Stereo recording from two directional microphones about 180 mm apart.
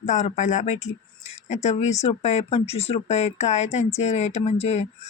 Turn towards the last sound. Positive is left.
turn(degrees=35)  # may be behind; listen again after turning